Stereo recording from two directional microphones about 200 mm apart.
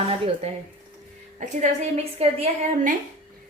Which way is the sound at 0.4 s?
30° right (ahead or behind).